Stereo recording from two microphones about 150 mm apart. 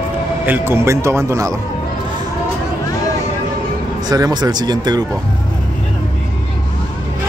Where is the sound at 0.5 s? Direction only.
15° right (ahead or behind).